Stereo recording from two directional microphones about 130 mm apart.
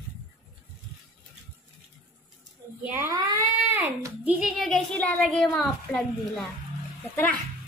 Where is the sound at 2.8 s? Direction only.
15° right (ahead or behind).